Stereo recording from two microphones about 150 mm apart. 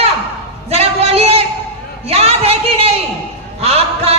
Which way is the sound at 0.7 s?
45° right (ahead or behind).